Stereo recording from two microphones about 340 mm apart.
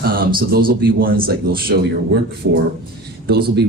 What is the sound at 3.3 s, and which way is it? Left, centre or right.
Speech, right.